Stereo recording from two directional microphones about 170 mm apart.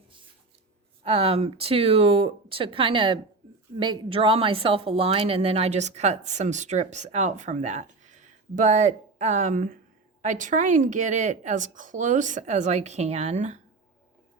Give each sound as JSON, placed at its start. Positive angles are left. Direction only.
{"t": 1.0, "sound": "a woman's voice", "side_deg": -35}